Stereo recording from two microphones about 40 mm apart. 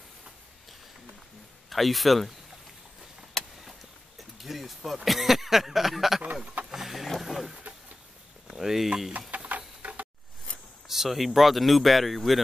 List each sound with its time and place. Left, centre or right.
1.7 s speech: centre
3.4 s vehicle: centre
4.2 s speech: centre
6.7 s music: centre
7.2 s vehicle: centre
8.5 s speech: centre
9.3 s a sound: right
10.9 s speech: centre